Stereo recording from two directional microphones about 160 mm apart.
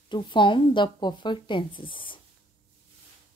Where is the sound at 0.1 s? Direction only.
30° left (ahead or behind).